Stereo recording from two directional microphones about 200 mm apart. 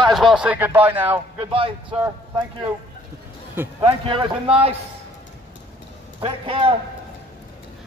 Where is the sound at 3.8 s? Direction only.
25° right (ahead or behind).